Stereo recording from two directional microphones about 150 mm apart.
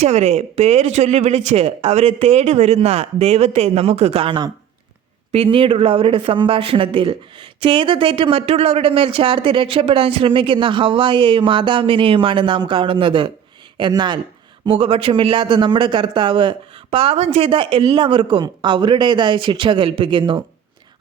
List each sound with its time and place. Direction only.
0.0 s a man's voice: 45° right (ahead or behind)